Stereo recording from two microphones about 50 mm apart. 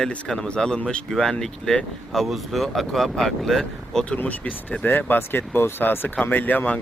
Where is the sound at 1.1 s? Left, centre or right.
Centre.